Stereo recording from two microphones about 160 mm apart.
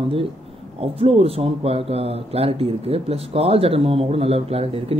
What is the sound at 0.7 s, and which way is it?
Speech, 40° right (ahead or behind).